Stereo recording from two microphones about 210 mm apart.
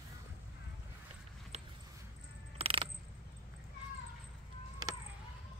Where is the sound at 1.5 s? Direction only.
30° right (ahead or behind).